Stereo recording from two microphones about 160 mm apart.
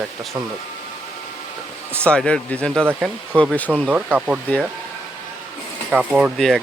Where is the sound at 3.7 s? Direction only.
10° right (ahead or behind).